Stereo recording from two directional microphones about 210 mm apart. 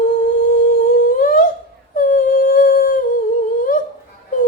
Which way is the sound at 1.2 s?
40° left (ahead or behind).